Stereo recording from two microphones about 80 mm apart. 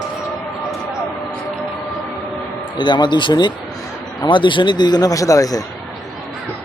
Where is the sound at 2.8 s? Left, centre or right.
Left.